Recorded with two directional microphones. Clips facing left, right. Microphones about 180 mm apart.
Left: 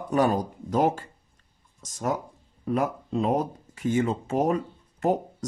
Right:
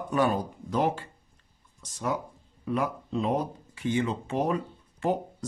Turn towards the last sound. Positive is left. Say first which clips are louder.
# left 3 dB
turn(degrees=45)  # may be behind; listen again after turning